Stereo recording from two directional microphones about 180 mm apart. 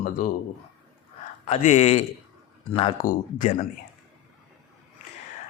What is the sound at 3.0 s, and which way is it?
Speech, 45° left (ahead or behind).